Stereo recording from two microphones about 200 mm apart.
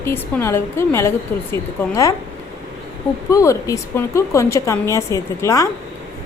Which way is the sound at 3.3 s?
15° left (ahead or behind).